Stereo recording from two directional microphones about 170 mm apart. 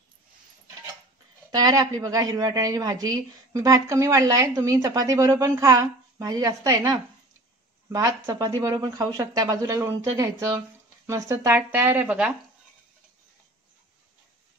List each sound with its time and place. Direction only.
1.5 s speech: 20° right (ahead or behind); by 12.4 s 5° right (ahead or behind)